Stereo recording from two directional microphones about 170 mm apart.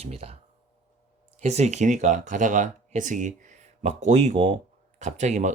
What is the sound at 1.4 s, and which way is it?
Speech, 40° right (ahead or behind).